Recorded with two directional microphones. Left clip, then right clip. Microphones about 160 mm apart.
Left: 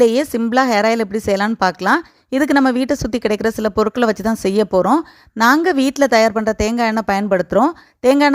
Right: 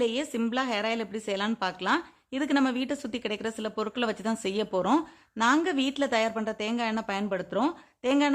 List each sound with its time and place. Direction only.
0.0 s a woman's voice: 50° left (ahead or behind)